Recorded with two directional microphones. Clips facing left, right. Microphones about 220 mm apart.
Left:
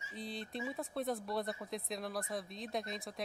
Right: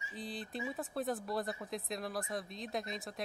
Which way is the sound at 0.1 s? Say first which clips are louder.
Even; centre (ahead or behind).